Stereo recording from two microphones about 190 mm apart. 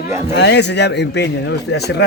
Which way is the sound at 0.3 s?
65° left (ahead or behind).